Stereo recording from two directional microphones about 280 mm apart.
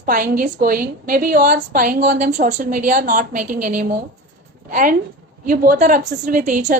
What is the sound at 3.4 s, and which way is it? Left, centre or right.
Speech, right.